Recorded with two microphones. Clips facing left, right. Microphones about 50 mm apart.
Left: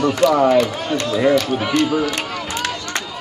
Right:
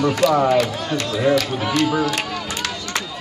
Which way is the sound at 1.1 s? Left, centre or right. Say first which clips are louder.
Left 3 dB; left.